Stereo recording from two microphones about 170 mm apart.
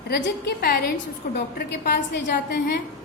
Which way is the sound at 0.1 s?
65° left (ahead or behind).